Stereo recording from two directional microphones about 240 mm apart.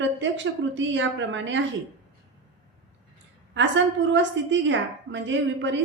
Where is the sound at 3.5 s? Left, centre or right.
Right.